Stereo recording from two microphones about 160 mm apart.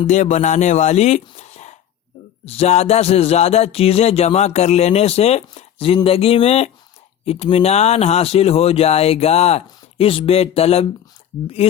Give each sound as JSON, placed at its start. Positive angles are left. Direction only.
{"t": 0.1, "sound": "speech", "side_deg": 50}